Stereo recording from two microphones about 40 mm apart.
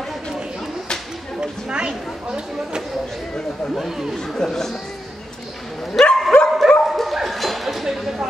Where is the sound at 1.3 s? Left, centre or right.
Right.